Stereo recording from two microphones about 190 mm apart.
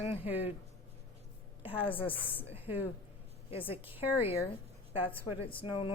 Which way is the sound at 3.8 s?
10° right (ahead or behind).